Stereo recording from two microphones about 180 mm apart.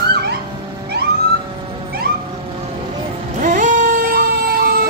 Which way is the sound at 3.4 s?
45° right (ahead or behind).